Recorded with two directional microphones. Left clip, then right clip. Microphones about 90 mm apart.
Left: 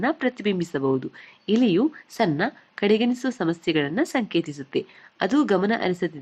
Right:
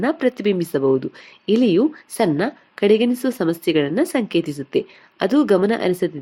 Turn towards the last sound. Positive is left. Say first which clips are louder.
# right 5 dB
turn(degrees=-30)  # may be behind; listen again after turning